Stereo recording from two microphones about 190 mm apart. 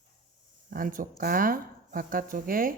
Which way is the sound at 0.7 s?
45° right (ahead or behind).